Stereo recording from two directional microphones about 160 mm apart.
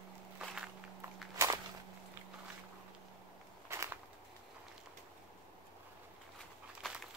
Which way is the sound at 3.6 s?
15° right (ahead or behind).